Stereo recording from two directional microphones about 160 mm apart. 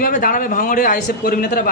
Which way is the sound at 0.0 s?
60° left (ahead or behind).